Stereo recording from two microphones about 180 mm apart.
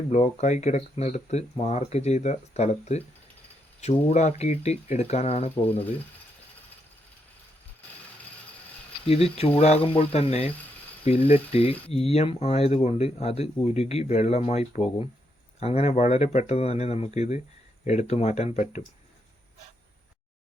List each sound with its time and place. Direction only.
0.1 s speech: 40° left (ahead or behind)
9.0 s speech: 35° left (ahead or behind)